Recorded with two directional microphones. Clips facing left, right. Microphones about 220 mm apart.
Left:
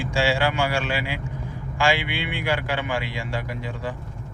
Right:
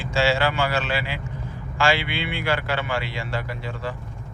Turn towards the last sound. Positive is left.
turn(degrees=15)  # may be behind; listen again after turning